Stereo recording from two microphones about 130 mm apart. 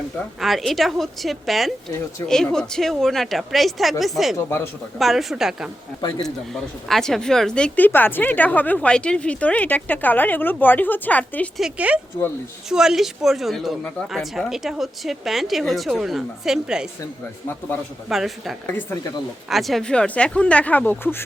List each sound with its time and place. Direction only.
0.3 s a woman's voice: centre (ahead or behind)
4.4 s speech: 20° left (ahead or behind)
4.9 s a woman's voice: centre (ahead or behind)
11.5 s speech: 5° right (ahead or behind)
12.1 s speech: 15° left (ahead or behind)
12.6 s a woman's voice: 5° right (ahead or behind)
18.1 s a woman's voice: centre (ahead or behind)
18.8 s speech: 20° left (ahead or behind)
19.5 s speech: centre (ahead or behind); by 21.2 s 15° left (ahead or behind)